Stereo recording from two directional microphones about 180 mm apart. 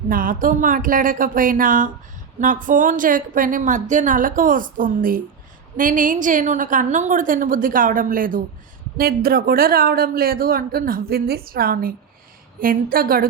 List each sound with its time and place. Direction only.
0.1 s a woman's voice: 50° right (ahead or behind)